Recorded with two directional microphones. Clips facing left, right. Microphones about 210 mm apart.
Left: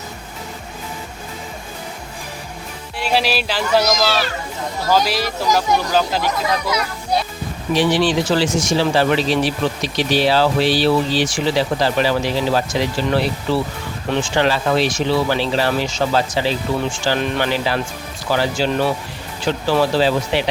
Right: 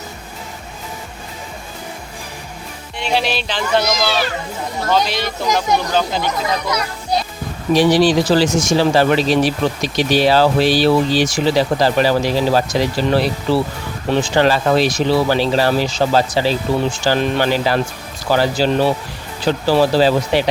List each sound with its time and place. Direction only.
3.0 s speech: 5° left (ahead or behind)
7.7 s speech: 40° right (ahead or behind)